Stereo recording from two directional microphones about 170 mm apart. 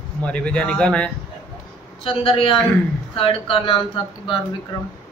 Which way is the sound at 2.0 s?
35° left (ahead or behind).